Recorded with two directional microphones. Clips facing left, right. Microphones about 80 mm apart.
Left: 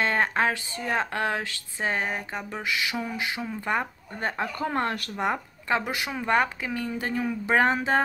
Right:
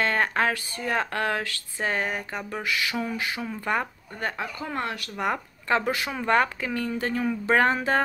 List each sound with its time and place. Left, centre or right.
0.0 s speech: centre
4.6 s speech: left
5.1 s speech: centre